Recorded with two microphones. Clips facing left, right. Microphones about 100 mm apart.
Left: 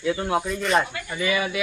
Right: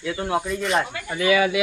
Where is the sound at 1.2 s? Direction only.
90° right.